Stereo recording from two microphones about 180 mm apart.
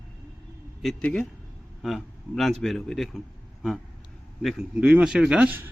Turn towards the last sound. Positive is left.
turn(degrees=-10)  # may be behind; listen again after turning